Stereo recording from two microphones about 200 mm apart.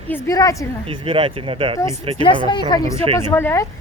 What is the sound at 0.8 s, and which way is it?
Speech, 25° right (ahead or behind).